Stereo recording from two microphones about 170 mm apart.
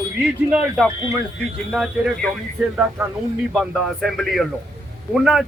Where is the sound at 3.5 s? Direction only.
Centre (ahead or behind).